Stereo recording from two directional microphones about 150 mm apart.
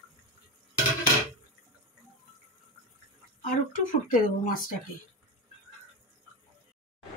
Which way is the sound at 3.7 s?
65° left (ahead or behind).